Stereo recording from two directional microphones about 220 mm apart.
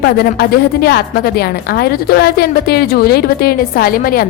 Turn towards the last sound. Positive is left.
turn(degrees=40)  # may be behind; listen again after turning